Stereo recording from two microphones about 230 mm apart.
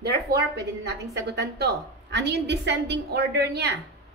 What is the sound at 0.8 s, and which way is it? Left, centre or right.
A woman's voice, right.